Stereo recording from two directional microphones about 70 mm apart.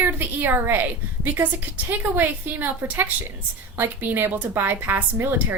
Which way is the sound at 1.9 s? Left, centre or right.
Right.